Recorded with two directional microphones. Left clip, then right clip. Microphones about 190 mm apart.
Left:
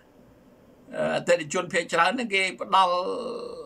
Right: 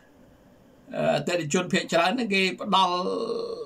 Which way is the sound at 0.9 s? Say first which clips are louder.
Left 1 dB; 20° right (ahead or behind).